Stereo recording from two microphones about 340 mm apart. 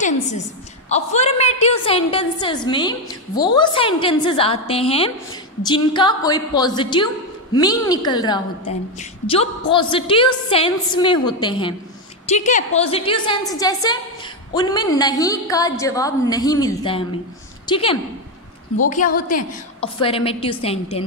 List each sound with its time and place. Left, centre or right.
0.8 s a woman's voice: centre